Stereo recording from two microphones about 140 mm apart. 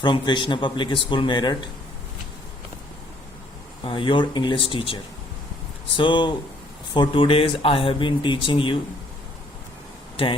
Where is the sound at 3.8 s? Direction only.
35° left (ahead or behind).